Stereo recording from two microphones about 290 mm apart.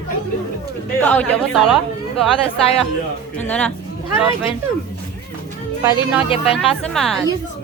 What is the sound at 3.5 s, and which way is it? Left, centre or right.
Speech, centre.